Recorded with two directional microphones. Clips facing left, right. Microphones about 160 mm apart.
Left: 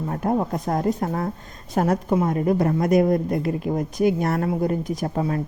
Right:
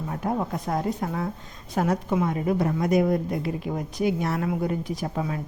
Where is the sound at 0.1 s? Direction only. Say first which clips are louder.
Left 4 dB; 45° left (ahead or behind).